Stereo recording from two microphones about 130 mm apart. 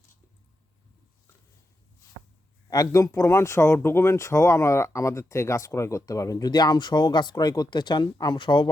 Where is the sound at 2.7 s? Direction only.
25° left (ahead or behind).